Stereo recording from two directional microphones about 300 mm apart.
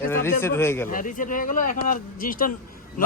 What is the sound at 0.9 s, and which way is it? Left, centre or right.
Speech, left.